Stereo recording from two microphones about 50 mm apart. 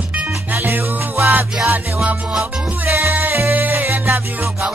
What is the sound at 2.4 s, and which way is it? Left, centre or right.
Music, right.